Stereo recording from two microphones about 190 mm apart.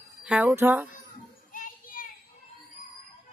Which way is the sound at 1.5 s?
45° left (ahead or behind).